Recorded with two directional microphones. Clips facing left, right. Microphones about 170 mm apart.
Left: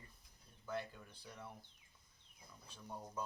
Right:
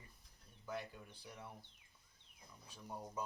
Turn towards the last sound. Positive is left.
turn(degrees=-15)  # may be behind; listen again after turning